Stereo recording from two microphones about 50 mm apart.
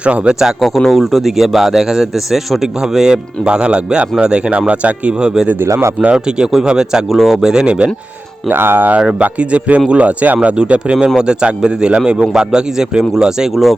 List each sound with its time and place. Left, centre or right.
0.0 s speech: right
0.6 s speech: centre; by 5.3 s right
5.6 s speech: right
6.1 s speech: centre
7.5 s speech: centre
8.4 s speech: right
9.0 s speech: centre
13.5 s speech: centre